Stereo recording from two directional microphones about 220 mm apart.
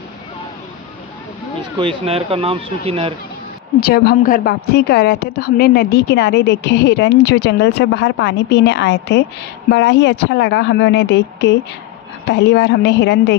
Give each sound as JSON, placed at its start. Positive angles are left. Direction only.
{"t": 1.8, "sound": "speech", "side_deg": -25}
{"t": 3.8, "sound": "a woman's voice", "side_deg": 45}